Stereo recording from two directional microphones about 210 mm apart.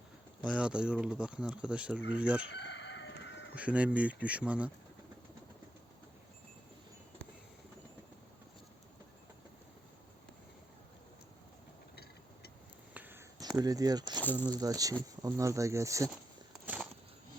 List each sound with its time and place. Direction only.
0.4 s speech: 5° right (ahead or behind)
2.5 s chicken: 55° left (ahead or behind)
3.5 s speech: 5° right (ahead or behind)
12.9 s a sound: 10° right (ahead or behind)
13.6 s speech: 15° right (ahead or behind)
16.6 s a sound: 5° right (ahead or behind)